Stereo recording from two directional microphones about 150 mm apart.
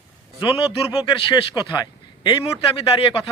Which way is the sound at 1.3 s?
30° left (ahead or behind).